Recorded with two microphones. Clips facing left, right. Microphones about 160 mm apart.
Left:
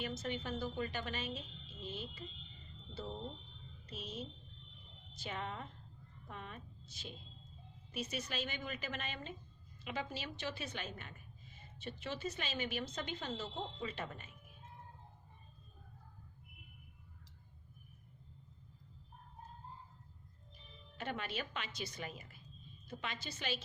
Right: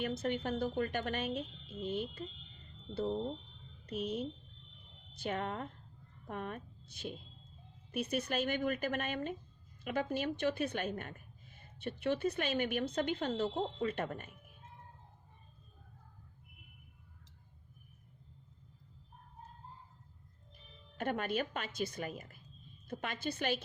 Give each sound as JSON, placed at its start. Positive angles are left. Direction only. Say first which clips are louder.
{"t": 0.0, "sound": "a woman's voice", "louder": "right 6 dB", "side_deg": -55}
{"t": 21.0, "sound": "a woman's voice", "louder": "right 7 dB", "side_deg": -50}